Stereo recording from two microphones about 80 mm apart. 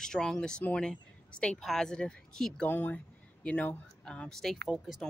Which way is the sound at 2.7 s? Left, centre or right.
Left.